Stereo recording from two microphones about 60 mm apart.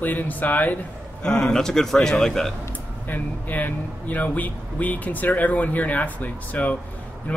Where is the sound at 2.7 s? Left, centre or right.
Left.